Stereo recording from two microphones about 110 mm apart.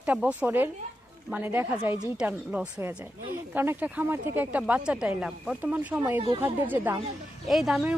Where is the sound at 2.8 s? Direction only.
20° right (ahead or behind).